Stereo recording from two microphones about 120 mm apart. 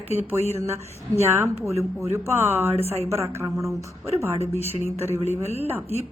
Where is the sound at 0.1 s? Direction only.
15° right (ahead or behind).